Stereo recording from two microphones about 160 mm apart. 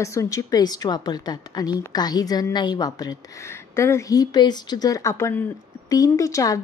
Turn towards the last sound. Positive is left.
turn(degrees=20)  # may be behind; listen again after turning